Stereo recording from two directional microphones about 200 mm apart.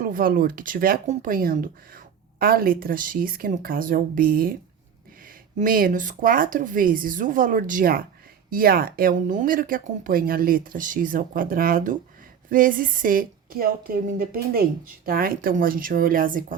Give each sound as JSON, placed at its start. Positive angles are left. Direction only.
{"t": 0.0, "sound": "speech", "side_deg": -45}
{"t": 5.5, "sound": "speech", "side_deg": -45}